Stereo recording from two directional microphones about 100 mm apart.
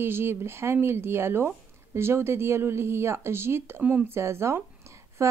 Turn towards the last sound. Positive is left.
turn(degrees=-30)  # may be behind; listen again after turning